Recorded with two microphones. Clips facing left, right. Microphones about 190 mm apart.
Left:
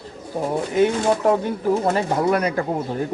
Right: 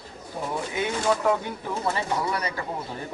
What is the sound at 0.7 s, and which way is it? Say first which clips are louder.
Speech: left 7 dB; 40° left (ahead or behind).